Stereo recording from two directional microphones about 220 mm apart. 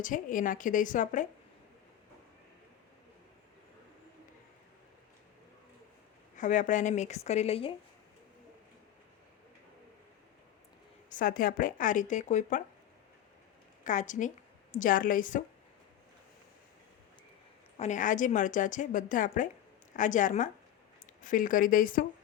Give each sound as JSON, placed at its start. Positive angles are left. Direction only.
{"t": 0.0, "sound": "a woman's voice", "side_deg": 35}
{"t": 6.3, "sound": "a woman's voice", "side_deg": 35}
{"t": 11.1, "sound": "a woman's voice", "side_deg": 40}
{"t": 13.8, "sound": "a woman's voice", "side_deg": 35}
{"t": 17.7, "sound": "a woman's voice", "side_deg": 35}